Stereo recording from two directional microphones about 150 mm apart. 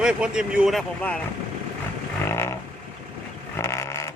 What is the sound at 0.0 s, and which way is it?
Speech, 5° right (ahead or behind).